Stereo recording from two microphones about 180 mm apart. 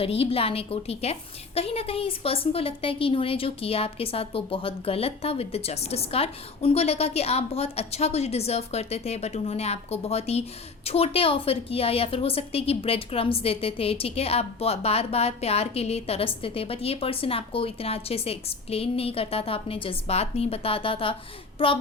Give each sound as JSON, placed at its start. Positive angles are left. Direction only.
{"t": 0.0, "sound": "a woman's voice", "side_deg": 30}
{"t": 21.6, "sound": "child singing", "side_deg": 30}